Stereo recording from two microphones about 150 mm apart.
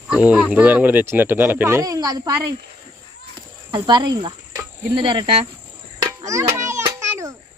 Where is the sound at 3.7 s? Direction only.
30° right (ahead or behind).